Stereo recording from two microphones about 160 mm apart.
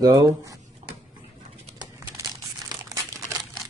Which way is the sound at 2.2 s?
20° right (ahead or behind).